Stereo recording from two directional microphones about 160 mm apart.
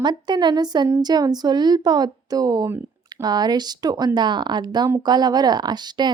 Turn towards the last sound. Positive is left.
turn(degrees=-25)  # may be behind; listen again after turning